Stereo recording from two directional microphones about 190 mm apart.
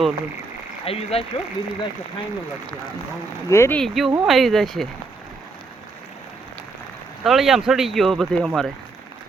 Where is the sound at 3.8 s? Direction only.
Centre (ahead or behind).